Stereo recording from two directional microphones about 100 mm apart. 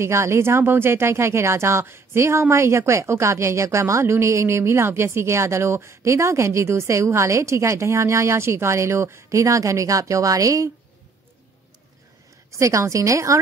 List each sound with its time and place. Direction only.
0.0 s speech: 25° right (ahead or behind)
12.4 s a woman's voice: 30° right (ahead or behind)